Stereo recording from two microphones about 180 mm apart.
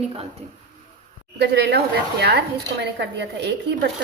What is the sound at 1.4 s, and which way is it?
A woman's voice, 70° right (ahead or behind).